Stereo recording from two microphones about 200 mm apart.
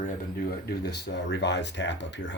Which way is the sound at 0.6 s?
55° left (ahead or behind).